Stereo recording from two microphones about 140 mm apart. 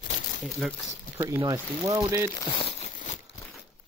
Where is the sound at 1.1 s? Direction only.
25° right (ahead or behind).